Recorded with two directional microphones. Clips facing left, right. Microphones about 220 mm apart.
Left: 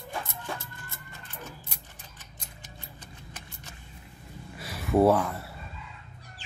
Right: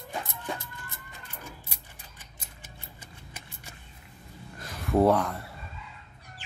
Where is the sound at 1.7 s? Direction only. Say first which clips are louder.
Left 1 dB; 5° right (ahead or behind).